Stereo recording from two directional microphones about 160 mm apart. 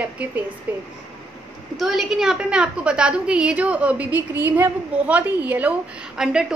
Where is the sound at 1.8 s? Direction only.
Centre (ahead or behind).